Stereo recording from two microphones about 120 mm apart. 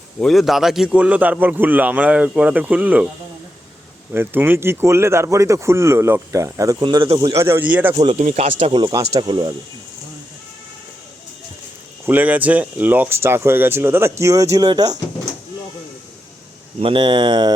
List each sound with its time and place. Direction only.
0.2 s a man's voice: centre (ahead or behind)
4.1 s speech: 15° right (ahead or behind)
6.8 s speech: 40° right (ahead or behind)
7.3 s a man's voice: 20° right (ahead or behind)
8.2 s speech: 85° right
8.5 s speech: 50° right (ahead or behind)
9.2 s speech: 35° right (ahead or behind)
12.0 s speech: 15° right (ahead or behind); by 14.9 s 35° right (ahead or behind)
16.8 s speech: 45° right (ahead or behind)